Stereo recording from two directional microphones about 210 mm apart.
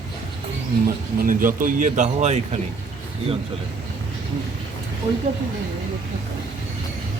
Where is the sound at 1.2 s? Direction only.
40° right (ahead or behind).